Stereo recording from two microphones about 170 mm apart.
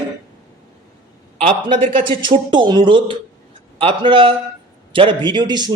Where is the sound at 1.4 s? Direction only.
30° right (ahead or behind).